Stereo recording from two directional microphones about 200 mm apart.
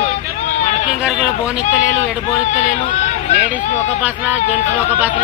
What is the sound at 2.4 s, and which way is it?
Speech, 35° left (ahead or behind).